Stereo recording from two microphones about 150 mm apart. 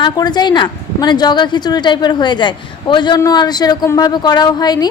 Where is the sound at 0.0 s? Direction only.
30° left (ahead or behind).